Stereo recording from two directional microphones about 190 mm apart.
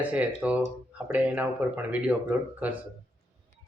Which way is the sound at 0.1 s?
5° right (ahead or behind).